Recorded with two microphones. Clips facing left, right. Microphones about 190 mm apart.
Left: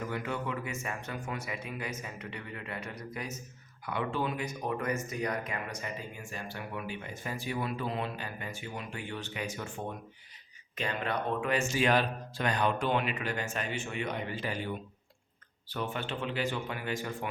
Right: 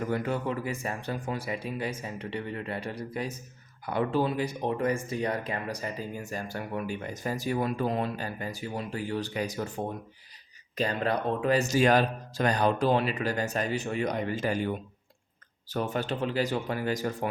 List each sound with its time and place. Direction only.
0.1 s speech: 40° right (ahead or behind)